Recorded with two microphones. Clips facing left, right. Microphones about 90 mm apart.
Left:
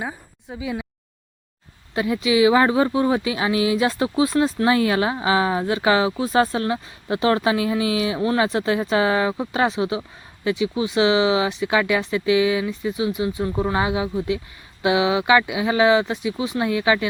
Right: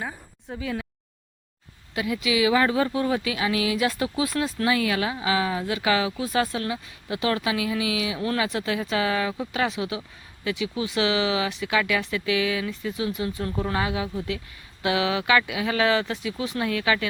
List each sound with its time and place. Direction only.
0.0 s speech: 10° left (ahead or behind)
2.0 s speech: 30° left (ahead or behind)